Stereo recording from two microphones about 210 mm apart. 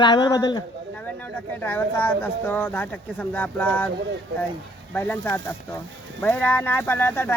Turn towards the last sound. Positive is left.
turn(degrees=10)  # may be behind; listen again after turning